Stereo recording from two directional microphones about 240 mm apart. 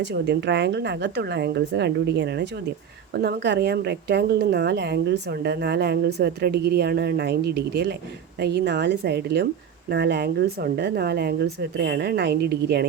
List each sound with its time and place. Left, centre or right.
0.0 s a woman's voice: right